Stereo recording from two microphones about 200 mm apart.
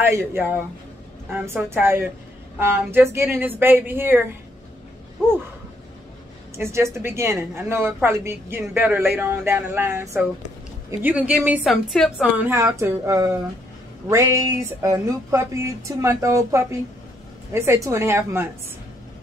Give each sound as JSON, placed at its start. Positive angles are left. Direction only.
{"t": 0.0, "sound": "a woman's voice", "side_deg": -10}
{"t": 6.5, "sound": "a woman's voice", "side_deg": -15}